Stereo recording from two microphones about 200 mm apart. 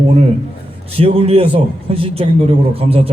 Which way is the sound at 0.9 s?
30° right (ahead or behind).